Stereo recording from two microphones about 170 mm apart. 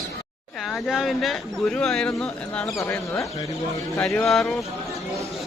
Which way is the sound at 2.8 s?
15° left (ahead or behind).